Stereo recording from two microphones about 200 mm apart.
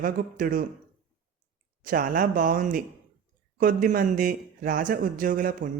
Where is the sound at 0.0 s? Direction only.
45° right (ahead or behind).